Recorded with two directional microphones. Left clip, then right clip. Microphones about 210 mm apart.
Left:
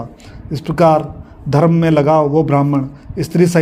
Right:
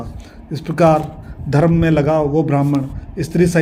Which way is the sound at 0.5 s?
25° left (ahead or behind).